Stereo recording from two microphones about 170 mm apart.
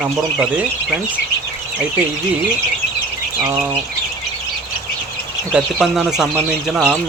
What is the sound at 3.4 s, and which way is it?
Speech, 15° right (ahead or behind).